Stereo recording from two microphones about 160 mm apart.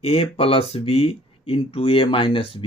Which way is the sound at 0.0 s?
35° left (ahead or behind).